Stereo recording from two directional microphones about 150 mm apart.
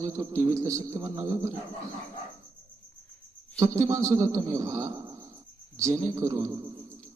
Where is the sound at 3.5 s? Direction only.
20° right (ahead or behind).